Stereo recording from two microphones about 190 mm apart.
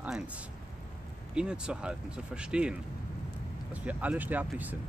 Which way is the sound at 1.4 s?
5° right (ahead or behind).